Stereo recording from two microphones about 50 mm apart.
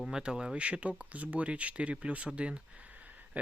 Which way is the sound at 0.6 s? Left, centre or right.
Right.